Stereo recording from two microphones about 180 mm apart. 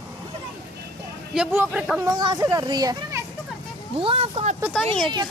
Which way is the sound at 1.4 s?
5° right (ahead or behind).